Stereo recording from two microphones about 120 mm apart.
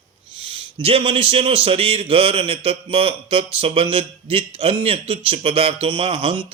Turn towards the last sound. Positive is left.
turn(degrees=-45)  # may be behind; listen again after turning